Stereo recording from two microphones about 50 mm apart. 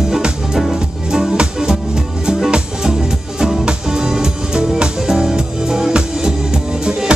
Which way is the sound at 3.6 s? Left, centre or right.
Centre.